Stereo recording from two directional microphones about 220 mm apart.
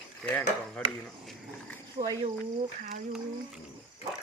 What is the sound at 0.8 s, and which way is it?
Speech, 5° left (ahead or behind).